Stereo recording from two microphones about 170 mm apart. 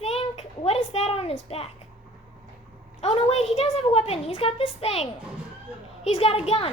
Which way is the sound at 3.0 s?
40° left (ahead or behind).